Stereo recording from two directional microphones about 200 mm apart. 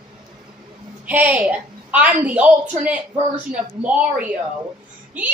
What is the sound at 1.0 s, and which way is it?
A woman's voice, 5° right (ahead or behind).